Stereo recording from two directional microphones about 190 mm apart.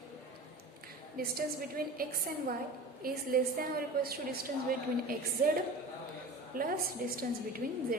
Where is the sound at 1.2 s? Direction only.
50° right (ahead or behind).